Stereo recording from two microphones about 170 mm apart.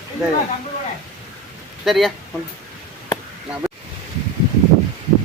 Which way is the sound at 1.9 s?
Centre (ahead or behind).